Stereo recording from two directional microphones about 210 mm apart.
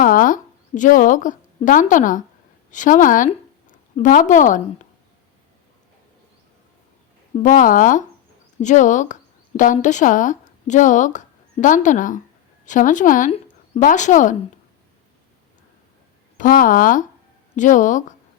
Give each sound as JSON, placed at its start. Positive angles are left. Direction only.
{"t": 0.0, "sound": "a woman's voice", "side_deg": 40}
{"t": 7.3, "sound": "a woman's voice", "side_deg": 40}
{"t": 16.4, "sound": "a woman's voice", "side_deg": 40}